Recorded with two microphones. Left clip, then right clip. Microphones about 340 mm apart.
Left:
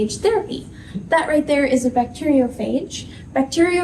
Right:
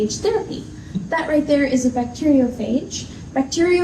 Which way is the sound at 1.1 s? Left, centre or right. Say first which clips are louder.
Left 1 dB; left.